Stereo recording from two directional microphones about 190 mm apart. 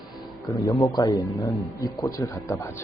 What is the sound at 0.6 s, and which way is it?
Speech, 20° left (ahead or behind).